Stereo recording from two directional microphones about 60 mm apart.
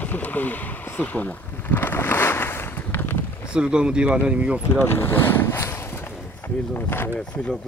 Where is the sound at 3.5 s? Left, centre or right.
Centre.